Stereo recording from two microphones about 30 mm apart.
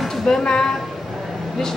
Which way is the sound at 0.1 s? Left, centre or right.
Centre.